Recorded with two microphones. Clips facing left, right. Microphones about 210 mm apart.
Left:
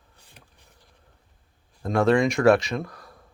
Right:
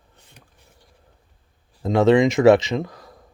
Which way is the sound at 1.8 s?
20° right (ahead or behind).